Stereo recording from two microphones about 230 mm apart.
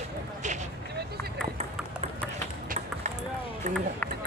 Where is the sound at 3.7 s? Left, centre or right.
Right.